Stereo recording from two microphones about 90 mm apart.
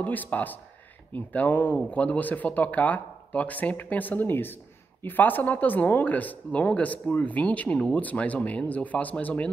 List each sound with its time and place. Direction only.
0.0 s speech: 20° left (ahead or behind)